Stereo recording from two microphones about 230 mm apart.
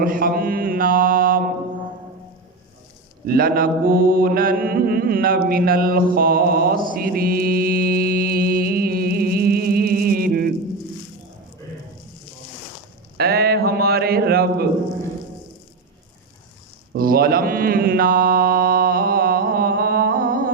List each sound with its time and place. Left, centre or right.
0.0 s mantra: right
3.2 s mantra: right
13.1 s a sound: right
16.9 s mantra: right